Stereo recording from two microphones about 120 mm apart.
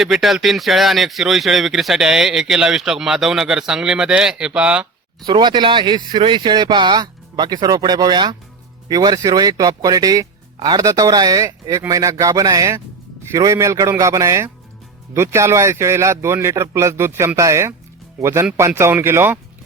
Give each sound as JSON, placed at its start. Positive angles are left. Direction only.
{"t": 0.0, "sound": "speech", "side_deg": 0}
{"t": 5.2, "sound": "speech", "side_deg": -40}